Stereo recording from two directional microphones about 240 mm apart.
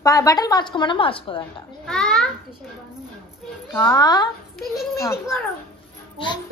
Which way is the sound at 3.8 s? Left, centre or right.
Centre.